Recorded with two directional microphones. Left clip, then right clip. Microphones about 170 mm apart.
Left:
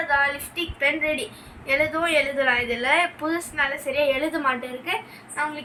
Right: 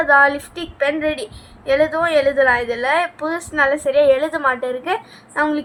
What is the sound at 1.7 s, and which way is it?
A woman's voice, 20° right (ahead or behind).